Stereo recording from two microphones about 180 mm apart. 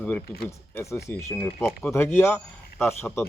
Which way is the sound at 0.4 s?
15° left (ahead or behind).